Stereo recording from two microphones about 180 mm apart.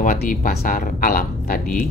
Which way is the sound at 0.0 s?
50° left (ahead or behind).